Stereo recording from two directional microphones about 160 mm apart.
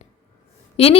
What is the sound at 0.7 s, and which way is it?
Speech, 35° left (ahead or behind).